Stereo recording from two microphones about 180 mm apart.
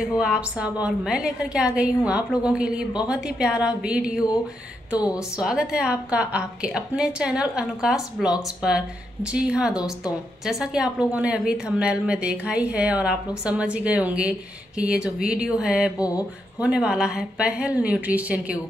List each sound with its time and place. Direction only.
0.2 s a woman's voice: 5° right (ahead or behind)
5.4 s a woman's voice: 5° right (ahead or behind)
16.0 s mantra: 20° left (ahead or behind)
16.5 s a woman's voice: 5° right (ahead or behind)